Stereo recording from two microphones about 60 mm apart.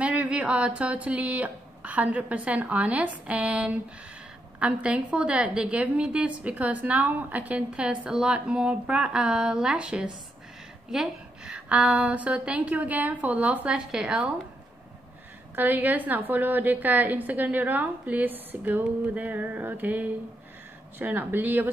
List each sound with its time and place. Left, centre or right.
0.0 s a woman's voice: right
11.5 s a woman's voice: right
13.7 s speech: centre
15.5 s a woman's voice: right